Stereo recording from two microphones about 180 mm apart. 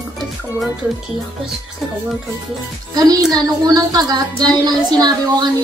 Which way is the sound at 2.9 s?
20° right (ahead or behind).